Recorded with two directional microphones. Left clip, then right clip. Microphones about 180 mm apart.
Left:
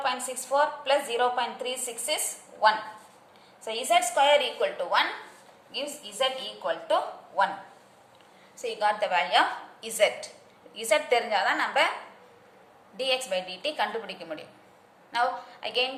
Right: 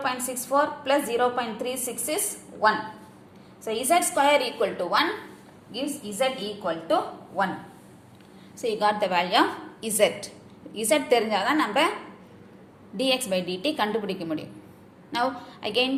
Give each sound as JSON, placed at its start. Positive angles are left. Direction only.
{"t": 0.0, "sound": "a woman's voice", "side_deg": -10}
{"t": 3.6, "sound": "a woman's voice", "side_deg": -10}
{"t": 8.5, "sound": "a woman's voice", "side_deg": -20}
{"t": 13.0, "sound": "a woman's voice", "side_deg": -15}